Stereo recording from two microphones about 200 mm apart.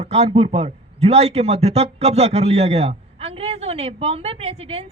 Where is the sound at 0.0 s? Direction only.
30° right (ahead or behind).